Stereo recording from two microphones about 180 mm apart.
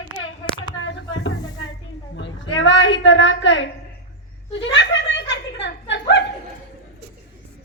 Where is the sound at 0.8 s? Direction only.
90° left.